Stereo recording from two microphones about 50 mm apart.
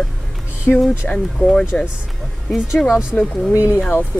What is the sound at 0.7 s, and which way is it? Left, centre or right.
Speech, centre.